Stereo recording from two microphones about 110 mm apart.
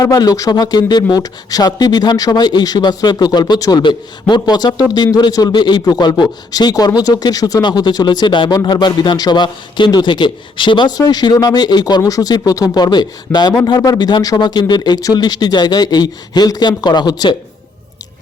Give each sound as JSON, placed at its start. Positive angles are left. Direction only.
{"t": 0.0, "sound": "speech", "side_deg": 35}